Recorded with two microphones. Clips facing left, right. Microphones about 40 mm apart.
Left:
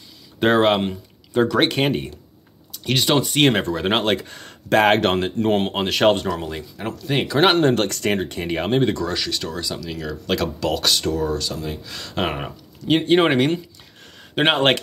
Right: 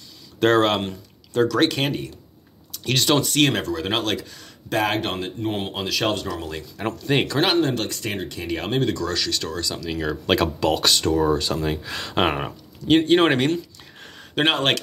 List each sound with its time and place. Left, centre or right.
0.4 s speech: centre
2.7 s speech: centre
3.4 s speech: left
5.7 s speech: left
6.8 s speech: centre
7.5 s speech: left
9.0 s speech: centre
10.3 s speech: centre
11.1 s speech: right
11.5 s speech: right
11.8 s speech: right
12.4 s speech: centre
14.1 s a sound: centre
14.4 s speech: left